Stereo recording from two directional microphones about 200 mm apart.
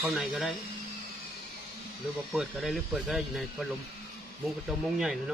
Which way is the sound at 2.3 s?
Centre (ahead or behind).